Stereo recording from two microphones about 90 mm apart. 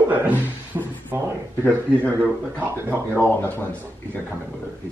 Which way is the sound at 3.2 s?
20° left (ahead or behind).